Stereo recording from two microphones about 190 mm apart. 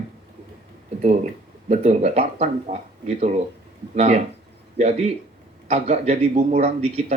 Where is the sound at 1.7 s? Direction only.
35° right (ahead or behind).